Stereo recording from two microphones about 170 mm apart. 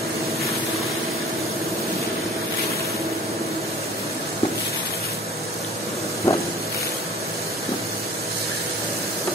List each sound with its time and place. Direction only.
6.3 s vehicle: 20° left (ahead or behind)